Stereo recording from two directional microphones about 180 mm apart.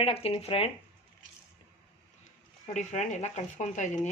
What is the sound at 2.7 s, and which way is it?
Speech, 40° left (ahead or behind).